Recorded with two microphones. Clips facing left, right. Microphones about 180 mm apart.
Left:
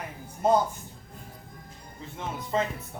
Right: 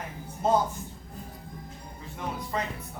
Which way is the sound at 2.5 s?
25° left (ahead or behind).